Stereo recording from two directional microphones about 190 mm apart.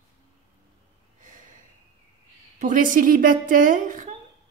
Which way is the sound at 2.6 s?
45° right (ahead or behind).